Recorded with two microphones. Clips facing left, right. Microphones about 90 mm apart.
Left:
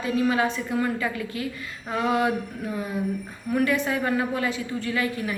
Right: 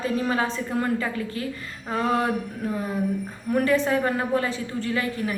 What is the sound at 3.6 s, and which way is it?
A woman's voice, 35° right (ahead or behind).